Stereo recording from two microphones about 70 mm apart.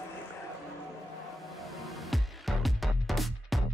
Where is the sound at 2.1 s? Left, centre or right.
Centre.